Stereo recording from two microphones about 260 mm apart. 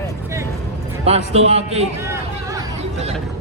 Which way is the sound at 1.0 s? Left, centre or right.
Right.